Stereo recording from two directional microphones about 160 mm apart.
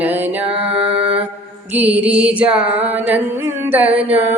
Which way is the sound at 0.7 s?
35° right (ahead or behind).